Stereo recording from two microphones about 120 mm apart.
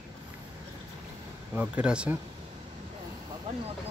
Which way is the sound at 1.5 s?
10° right (ahead or behind).